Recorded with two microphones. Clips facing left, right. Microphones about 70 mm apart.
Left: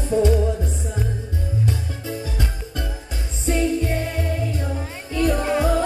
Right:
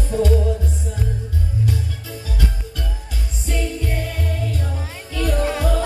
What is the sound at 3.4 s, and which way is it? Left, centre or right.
Music, left.